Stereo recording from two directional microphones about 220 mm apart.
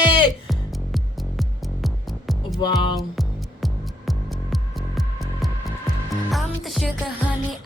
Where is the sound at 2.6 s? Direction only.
20° left (ahead or behind).